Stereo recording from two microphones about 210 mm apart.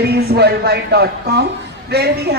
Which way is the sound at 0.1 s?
50° right (ahead or behind).